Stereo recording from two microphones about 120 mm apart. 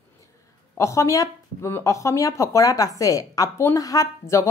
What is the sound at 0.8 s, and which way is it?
Speech, 25° left (ahead or behind).